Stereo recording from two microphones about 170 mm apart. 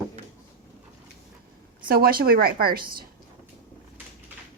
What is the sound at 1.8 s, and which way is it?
A woman's voice, 60° right (ahead or behind).